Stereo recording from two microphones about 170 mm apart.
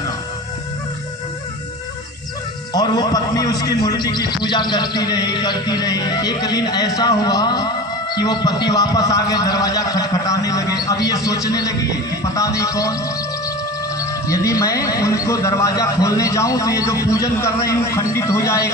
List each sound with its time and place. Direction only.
2.7 s a man's voice: 25° left (ahead or behind)
14.0 s a man's voice: 20° left (ahead or behind)